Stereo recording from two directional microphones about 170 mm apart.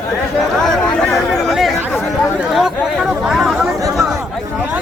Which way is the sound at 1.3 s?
Centre (ahead or behind).